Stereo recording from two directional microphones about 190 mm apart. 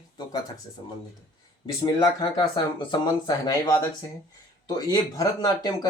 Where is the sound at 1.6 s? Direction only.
25° left (ahead or behind).